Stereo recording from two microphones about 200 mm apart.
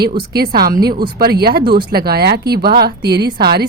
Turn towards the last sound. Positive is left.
turn(degrees=-55)  # may be behind; listen again after turning